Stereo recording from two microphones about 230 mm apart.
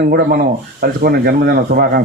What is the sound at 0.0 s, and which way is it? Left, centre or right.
Speech, right.